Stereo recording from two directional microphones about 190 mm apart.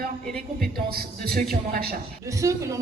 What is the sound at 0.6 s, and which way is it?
A man's voice, 55° right (ahead or behind).